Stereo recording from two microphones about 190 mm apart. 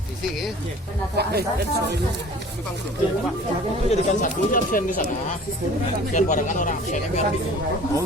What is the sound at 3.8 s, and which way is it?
Speech, 40° left (ahead or behind).